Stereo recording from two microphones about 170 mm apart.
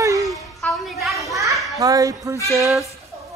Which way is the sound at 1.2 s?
20° right (ahead or behind).